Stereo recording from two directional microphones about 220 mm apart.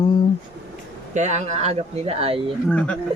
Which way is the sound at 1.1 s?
30° right (ahead or behind).